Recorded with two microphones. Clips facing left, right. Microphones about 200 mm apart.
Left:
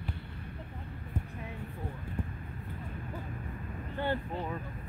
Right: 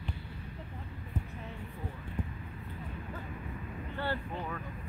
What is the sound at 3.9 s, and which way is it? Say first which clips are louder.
Vehicle: left 3 dB; 15° left (ahead or behind).